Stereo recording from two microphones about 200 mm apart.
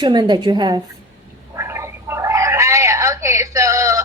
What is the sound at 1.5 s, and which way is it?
Gargling, 15° right (ahead or behind).